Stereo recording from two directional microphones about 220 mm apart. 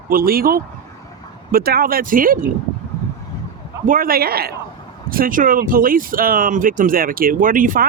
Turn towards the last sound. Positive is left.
turn(degrees=-40)  # may be behind; listen again after turning